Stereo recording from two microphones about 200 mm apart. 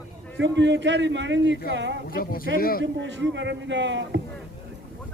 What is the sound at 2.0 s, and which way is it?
Speech, 45° left (ahead or behind).